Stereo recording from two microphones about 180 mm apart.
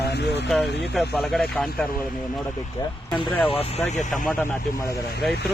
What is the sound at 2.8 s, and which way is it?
Speech, 25° left (ahead or behind).